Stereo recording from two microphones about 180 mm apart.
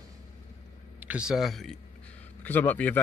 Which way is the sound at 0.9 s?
5° right (ahead or behind).